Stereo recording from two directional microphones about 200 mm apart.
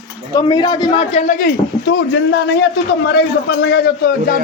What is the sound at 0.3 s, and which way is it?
A man's voice, 20° left (ahead or behind).